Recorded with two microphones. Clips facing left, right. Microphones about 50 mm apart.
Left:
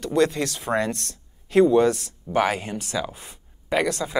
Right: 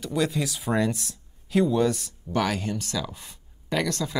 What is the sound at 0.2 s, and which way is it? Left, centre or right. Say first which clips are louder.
Speech: left 5 dB; centre.